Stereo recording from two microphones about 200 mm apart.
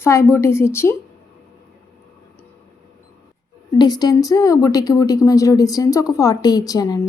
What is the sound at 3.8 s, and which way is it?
A woman's voice, 20° left (ahead or behind).